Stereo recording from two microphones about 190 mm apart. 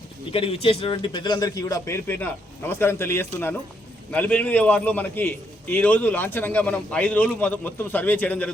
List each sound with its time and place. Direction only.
0.3 s a man's voice: 30° left (ahead or behind); by 8.4 s 10° left (ahead or behind)